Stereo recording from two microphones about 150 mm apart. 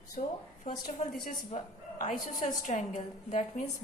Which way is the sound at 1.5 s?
50° left (ahead or behind).